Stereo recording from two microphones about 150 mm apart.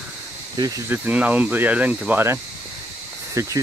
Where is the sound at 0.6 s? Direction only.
20° right (ahead or behind).